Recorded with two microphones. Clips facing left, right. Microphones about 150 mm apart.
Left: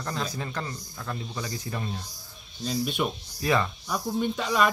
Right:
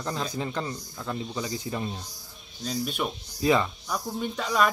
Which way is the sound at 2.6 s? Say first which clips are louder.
Left 2 dB; 5° left (ahead or behind).